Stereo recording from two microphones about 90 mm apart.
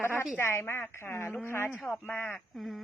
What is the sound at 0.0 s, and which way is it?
A woman's voice, 25° left (ahead or behind).